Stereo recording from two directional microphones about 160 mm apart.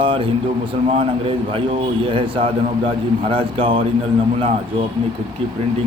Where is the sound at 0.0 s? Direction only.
35° right (ahead or behind).